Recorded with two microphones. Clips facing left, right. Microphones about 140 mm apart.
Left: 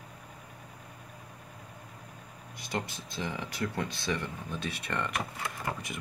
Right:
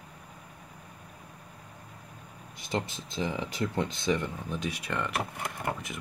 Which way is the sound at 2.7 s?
25° right (ahead or behind).